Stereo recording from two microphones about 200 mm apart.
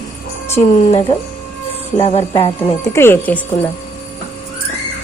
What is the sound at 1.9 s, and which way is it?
Speech, 30° left (ahead or behind).